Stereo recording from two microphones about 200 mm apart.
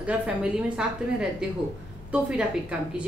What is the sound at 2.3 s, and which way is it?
Speech, 5° right (ahead or behind).